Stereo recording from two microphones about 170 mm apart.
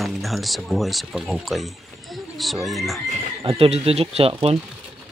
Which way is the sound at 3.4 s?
35° right (ahead or behind).